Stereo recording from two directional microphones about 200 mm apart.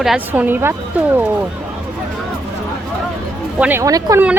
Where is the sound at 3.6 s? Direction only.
10° right (ahead or behind).